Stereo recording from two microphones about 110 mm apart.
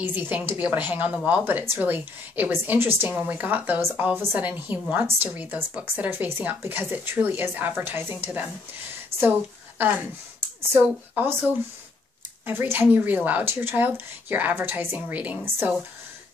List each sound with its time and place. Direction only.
0.0 s a woman's voice: 15° right (ahead or behind)
11.1 s a woman's voice: 15° right (ahead or behind)